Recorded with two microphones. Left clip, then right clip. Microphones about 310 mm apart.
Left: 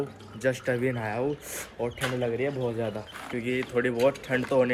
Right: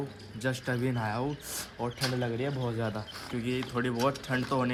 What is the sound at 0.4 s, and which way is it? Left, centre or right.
Speech, centre.